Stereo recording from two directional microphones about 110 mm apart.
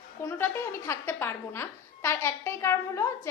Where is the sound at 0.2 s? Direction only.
20° left (ahead or behind).